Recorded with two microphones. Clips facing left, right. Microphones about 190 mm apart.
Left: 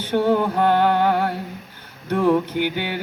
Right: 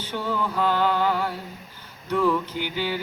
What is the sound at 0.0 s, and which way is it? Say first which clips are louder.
Music: left 9 dB; 60° left (ahead or behind).